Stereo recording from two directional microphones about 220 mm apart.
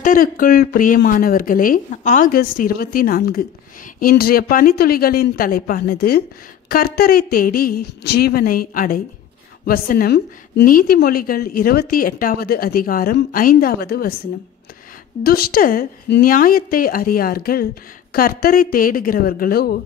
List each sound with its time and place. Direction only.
0.0 s speech: 40° left (ahead or behind)
15.2 s speech: 45° left (ahead or behind)